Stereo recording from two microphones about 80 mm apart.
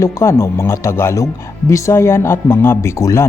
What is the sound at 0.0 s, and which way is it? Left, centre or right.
Speech, left.